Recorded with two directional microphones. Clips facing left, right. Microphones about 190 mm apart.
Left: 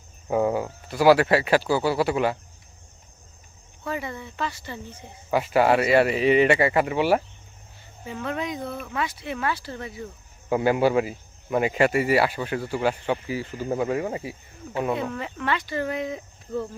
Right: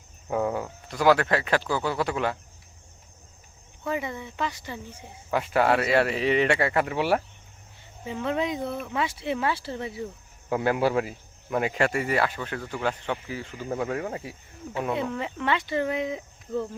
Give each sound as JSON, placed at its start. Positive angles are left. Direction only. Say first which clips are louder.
{"t": 0.3, "sound": "speech", "louder": "left 4 dB", "side_deg": 5}
{"t": 3.8, "sound": "speech", "louder": "right 1 dB", "side_deg": -15}
{"t": 5.3, "sound": "speech", "louder": "left 3 dB", "side_deg": 5}
{"t": 8.0, "sound": "speech", "louder": "right 2 dB", "side_deg": -20}
{"t": 10.5, "sound": "speech", "louder": "left 3 dB", "side_deg": 0}
{"t": 15.1, "sound": "speech", "louder": "even", "side_deg": -20}